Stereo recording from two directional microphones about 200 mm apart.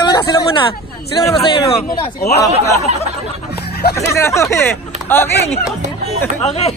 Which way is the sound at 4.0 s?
15° left (ahead or behind).